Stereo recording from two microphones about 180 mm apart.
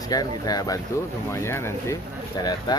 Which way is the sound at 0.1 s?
20° left (ahead or behind).